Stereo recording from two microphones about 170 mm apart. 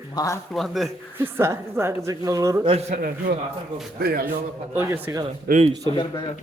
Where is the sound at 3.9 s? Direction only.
60° right (ahead or behind).